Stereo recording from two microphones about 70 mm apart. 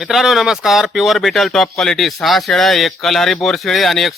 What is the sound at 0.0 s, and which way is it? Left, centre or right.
Speech, centre.